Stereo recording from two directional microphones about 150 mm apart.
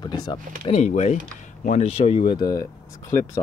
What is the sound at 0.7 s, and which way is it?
Speech, 50° left (ahead or behind).